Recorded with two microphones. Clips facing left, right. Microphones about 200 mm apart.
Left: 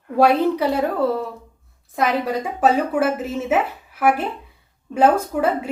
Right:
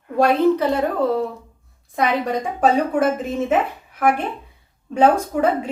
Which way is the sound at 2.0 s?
5° left (ahead or behind).